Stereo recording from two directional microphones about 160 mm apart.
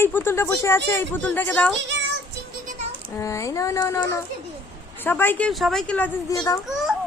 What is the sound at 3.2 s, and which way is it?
Speech, 20° left (ahead or behind).